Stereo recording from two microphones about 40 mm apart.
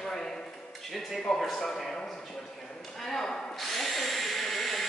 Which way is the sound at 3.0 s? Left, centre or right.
Centre.